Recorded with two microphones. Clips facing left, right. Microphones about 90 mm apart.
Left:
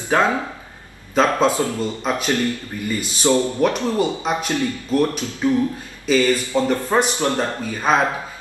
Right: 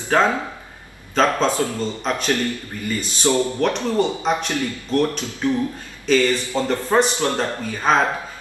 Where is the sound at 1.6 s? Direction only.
10° left (ahead or behind).